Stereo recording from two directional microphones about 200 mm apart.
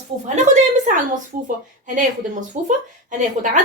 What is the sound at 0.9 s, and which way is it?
A woman's voice, 40° right (ahead or behind).